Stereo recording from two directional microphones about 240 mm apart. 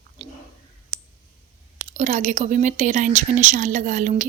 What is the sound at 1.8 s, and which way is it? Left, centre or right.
A woman's voice, right.